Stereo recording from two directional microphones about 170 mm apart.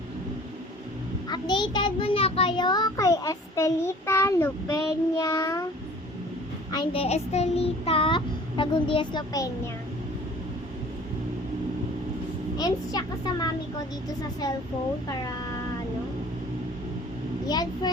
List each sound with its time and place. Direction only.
1.3 s a child's voice: 25° left (ahead or behind)
6.7 s a child's voice: 30° left (ahead or behind)
12.5 s a child's voice: 25° left (ahead or behind)
17.4 s a child's voice: 25° left (ahead or behind)